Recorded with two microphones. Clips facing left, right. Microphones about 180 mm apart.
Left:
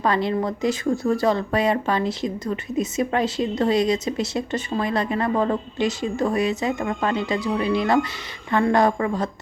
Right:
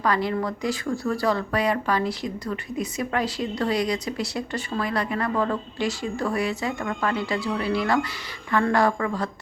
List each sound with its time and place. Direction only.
0.0 s speech: 25° left (ahead or behind)